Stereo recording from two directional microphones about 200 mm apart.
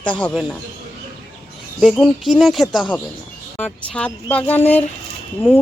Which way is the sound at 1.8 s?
Centre (ahead or behind).